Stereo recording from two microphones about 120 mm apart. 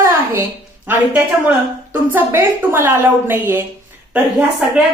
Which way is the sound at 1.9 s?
15° right (ahead or behind).